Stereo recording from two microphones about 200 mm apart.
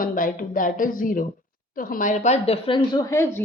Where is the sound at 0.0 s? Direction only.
45° left (ahead or behind).